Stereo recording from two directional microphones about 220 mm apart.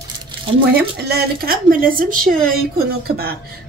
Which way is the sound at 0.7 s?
45° right (ahead or behind).